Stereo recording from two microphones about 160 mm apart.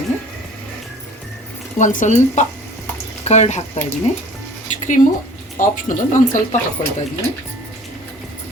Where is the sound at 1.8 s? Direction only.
50° left (ahead or behind).